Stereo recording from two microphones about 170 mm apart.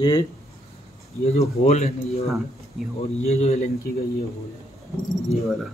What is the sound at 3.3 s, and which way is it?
Speech, 40° left (ahead or behind).